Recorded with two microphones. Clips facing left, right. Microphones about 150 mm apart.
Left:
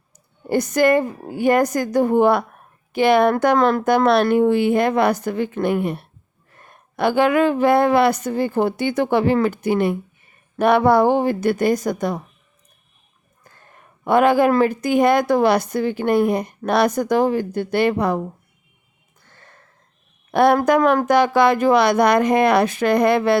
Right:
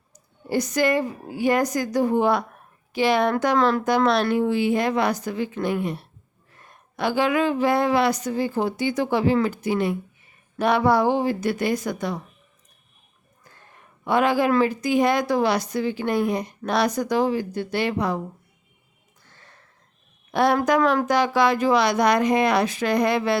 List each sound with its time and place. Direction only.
0.4 s a woman's voice: 55° left (ahead or behind)
14.0 s a woman's voice: 50° left (ahead or behind)
20.3 s speech: 55° left (ahead or behind)